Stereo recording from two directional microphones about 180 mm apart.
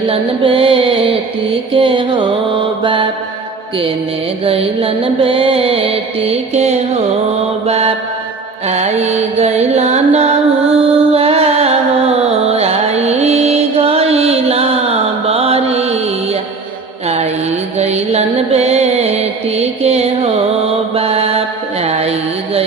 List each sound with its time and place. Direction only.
0.1 s mantra: 30° right (ahead or behind)
4.4 s mantra: 30° right (ahead or behind)
8.6 s music: 40° right (ahead or behind)
15.3 s mantra: 35° right (ahead or behind)
17.7 s mantra: 35° right (ahead or behind)
21.8 s carnatic music: 35° right (ahead or behind)